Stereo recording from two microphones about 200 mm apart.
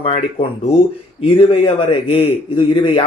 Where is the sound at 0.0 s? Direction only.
30° left (ahead or behind).